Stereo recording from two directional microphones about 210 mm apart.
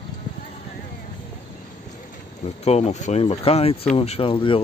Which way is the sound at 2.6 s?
30° left (ahead or behind).